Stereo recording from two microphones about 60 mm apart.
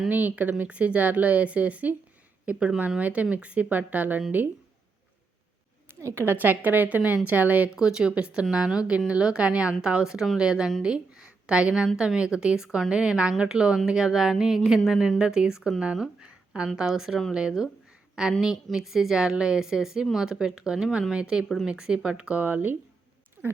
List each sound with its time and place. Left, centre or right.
0.1 s speech: right
6.0 s a woman's voice: right
6.2 s speech: right
7.8 s a woman's voice: centre
16.7 s a woman's voice: centre; by 22.8 s right